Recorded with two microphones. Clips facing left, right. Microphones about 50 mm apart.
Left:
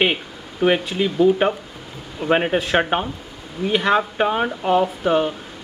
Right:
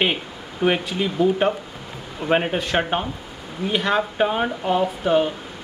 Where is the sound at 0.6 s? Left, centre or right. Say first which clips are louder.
Left 3 dB; centre.